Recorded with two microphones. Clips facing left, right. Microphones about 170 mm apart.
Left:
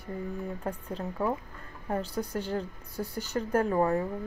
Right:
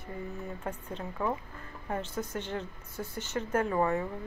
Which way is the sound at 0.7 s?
40° left (ahead or behind).